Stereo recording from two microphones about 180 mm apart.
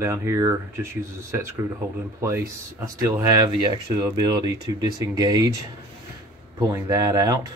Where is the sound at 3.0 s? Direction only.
15° right (ahead or behind).